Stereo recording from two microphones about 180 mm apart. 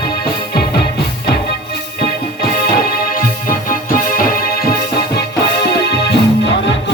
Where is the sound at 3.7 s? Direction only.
55° left (ahead or behind).